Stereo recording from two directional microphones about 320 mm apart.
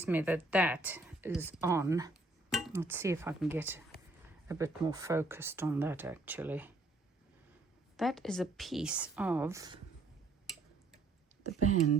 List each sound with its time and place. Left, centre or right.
0.0 s speech: centre
7.9 s a woman's voice: centre